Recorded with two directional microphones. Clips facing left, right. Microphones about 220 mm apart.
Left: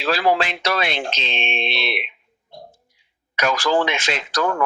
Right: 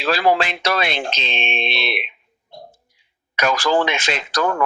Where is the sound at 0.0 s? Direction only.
45° right (ahead or behind).